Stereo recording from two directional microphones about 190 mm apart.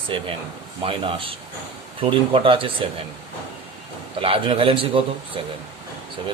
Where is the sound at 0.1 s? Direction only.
30° right (ahead or behind).